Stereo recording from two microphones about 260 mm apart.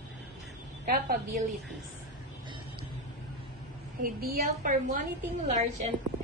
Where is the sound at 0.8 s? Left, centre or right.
Right.